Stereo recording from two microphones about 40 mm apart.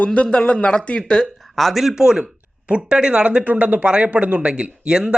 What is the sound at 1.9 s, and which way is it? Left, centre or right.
Speech, centre.